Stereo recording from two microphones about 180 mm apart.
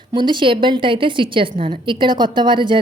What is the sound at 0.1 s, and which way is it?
A woman's voice, 25° right (ahead or behind).